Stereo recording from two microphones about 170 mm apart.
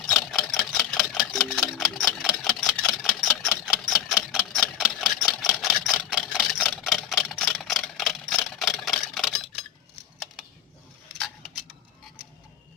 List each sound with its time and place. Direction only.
0.3 s camera: 5° left (ahead or behind)